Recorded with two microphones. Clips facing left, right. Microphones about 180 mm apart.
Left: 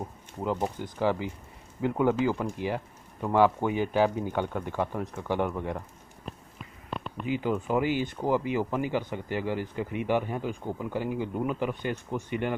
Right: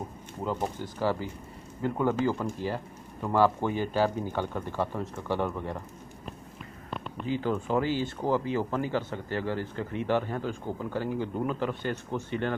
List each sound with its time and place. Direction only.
0.4 s speech: 15° left (ahead or behind)
7.2 s speech: 10° left (ahead or behind)